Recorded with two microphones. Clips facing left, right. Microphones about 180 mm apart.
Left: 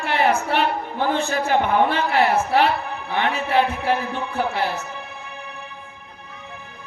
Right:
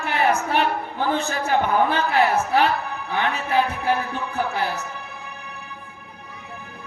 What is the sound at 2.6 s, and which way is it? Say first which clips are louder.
Speech: left 1 dB; 35° right (ahead or behind).